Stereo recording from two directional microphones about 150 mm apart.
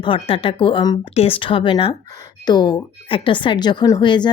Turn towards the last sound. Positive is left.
turn(degrees=30)  # may be behind; listen again after turning